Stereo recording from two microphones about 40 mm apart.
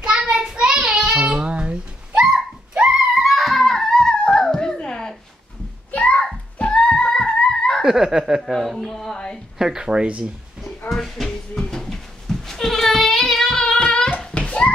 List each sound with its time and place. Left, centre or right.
0.0 s child singing: right
1.2 s babbling: right
2.7 s a sound: centre
3.3 s music: centre
3.6 s music: centre
5.9 s a sound: left
6.7 s music: left
7.8 s speech: centre
8.4 s speech: centre
9.1 s a woman's voice: centre
9.6 s speech: centre
9.8 s speech: right
10.9 s goat: centre
13.7 s child singing: left